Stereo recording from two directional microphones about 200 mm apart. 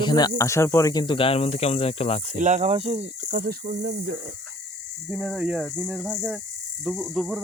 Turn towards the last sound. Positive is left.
turn(degrees=0)  # may be behind; listen again after turning